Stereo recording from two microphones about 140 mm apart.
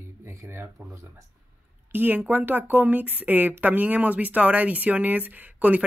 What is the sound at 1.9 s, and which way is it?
Speech, 15° right (ahead or behind).